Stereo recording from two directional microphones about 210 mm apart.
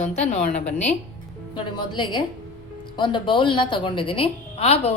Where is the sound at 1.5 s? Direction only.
20° left (ahead or behind).